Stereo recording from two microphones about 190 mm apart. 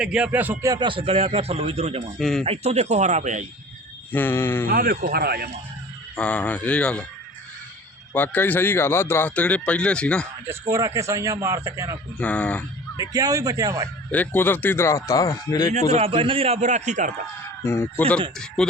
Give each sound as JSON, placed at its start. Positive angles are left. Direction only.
{"t": 0.0, "sound": "a man's voice", "side_deg": -5}
{"t": 2.1, "sound": "speech", "side_deg": 0}
{"t": 2.4, "sound": "a man's voice", "side_deg": -35}
{"t": 4.1, "sound": "speech", "side_deg": 10}
{"t": 4.7, "sound": "speech", "side_deg": -55}
{"t": 6.1, "sound": "speech", "side_deg": 5}
{"t": 8.1, "sound": "speech", "side_deg": 10}
{"t": 10.4, "sound": "a man's voice", "side_deg": -15}
{"t": 12.2, "sound": "speech", "side_deg": 5}
{"t": 13.0, "sound": "a man's voice", "side_deg": -20}
{"t": 14.1, "sound": "speech", "side_deg": 10}
{"t": 15.7, "sound": "a man's voice", "side_deg": -35}
{"t": 17.6, "sound": "speech", "side_deg": 15}